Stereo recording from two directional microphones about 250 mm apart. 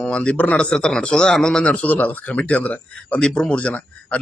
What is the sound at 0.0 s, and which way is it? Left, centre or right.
A man's voice, centre.